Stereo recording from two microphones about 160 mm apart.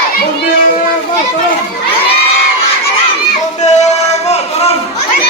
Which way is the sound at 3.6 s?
45° left (ahead or behind).